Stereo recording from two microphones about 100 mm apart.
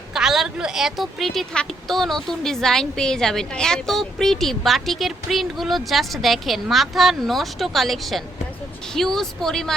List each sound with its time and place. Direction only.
0.1 s a woman's voice: 5° right (ahead or behind)